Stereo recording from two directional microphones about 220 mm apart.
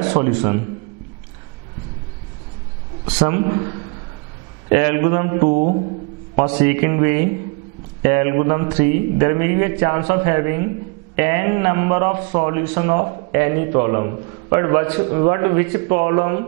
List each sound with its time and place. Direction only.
0.1 s a man's voice: 20° right (ahead or behind)
3.2 s a man's voice: 15° right (ahead or behind)
4.6 s a man's voice: 15° right (ahead or behind)
5.5 s mantra: 40° right (ahead or behind)
6.3 s a man's voice: 30° right (ahead or behind)
6.6 s a man's voice: 15° right (ahead or behind)